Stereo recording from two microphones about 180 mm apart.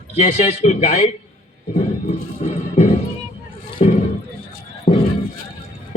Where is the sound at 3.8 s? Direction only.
35° left (ahead or behind).